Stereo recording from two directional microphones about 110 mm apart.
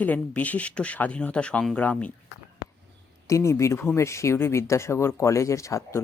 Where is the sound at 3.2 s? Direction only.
25° left (ahead or behind).